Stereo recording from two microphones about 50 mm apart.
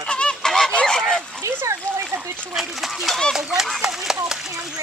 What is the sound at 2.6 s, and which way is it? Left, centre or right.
Speech, centre.